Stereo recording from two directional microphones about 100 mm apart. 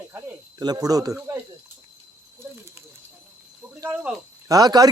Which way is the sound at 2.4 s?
25° right (ahead or behind).